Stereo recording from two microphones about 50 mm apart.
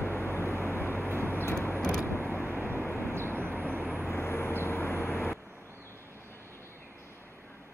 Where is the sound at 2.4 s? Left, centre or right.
Right.